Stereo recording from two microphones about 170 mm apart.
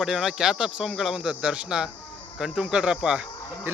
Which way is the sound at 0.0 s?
Centre (ahead or behind).